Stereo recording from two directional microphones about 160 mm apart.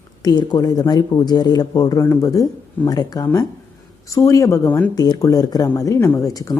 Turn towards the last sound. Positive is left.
turn(degrees=20)  # may be behind; listen again after turning